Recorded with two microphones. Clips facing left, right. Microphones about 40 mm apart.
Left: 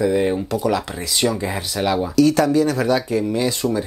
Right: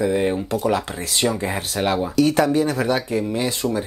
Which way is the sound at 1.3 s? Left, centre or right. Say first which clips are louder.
Even; centre.